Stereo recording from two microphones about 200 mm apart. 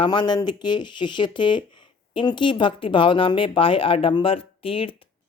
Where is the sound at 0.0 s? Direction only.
20° left (ahead or behind).